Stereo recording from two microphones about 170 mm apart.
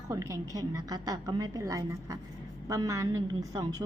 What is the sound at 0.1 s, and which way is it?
A woman's voice, 20° right (ahead or behind).